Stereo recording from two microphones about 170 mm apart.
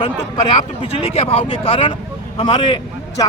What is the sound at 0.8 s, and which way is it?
A man's voice, 35° left (ahead or behind).